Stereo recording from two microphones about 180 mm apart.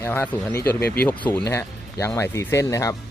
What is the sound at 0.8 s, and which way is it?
Speech, 60° left (ahead or behind).